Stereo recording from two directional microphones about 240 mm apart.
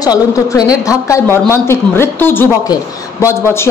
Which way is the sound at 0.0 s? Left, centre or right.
Centre.